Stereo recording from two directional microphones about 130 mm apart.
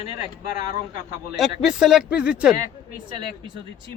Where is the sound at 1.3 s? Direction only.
5° right (ahead or behind).